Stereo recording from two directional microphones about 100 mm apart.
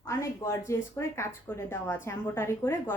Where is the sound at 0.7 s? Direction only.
25° left (ahead or behind).